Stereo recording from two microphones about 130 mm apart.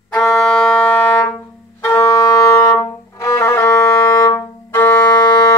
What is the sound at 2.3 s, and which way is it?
Music, 25° left (ahead or behind).